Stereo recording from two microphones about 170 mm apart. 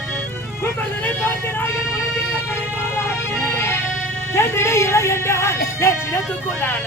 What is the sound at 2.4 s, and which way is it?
Music, 15° left (ahead or behind).